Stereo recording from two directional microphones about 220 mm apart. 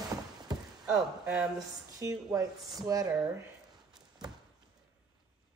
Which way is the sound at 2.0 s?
15° right (ahead or behind).